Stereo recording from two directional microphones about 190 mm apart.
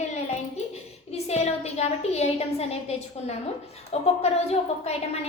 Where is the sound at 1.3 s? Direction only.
35° left (ahead or behind).